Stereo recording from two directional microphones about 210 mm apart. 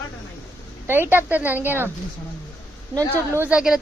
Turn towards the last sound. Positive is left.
turn(degrees=-5)  # may be behind; listen again after turning